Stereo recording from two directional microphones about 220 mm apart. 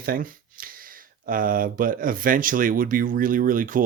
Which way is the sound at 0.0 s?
40° right (ahead or behind).